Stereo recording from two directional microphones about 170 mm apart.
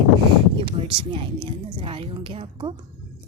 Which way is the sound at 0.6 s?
30° right (ahead or behind).